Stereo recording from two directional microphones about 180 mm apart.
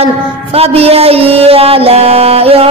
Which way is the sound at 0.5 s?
35° right (ahead or behind).